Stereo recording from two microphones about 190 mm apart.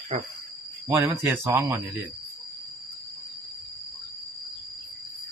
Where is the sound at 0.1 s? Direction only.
35° right (ahead or behind).